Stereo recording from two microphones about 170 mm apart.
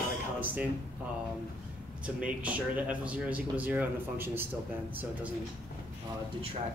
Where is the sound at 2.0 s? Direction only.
10° right (ahead or behind).